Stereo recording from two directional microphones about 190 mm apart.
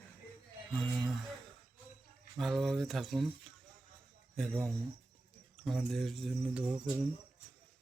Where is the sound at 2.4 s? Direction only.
Centre (ahead or behind).